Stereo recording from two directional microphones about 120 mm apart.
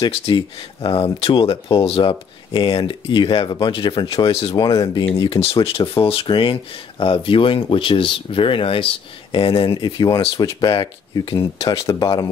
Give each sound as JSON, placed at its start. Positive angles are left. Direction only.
{"t": 0.0, "sound": "speech", "side_deg": 45}